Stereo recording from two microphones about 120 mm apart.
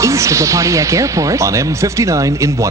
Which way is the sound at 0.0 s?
25° right (ahead or behind).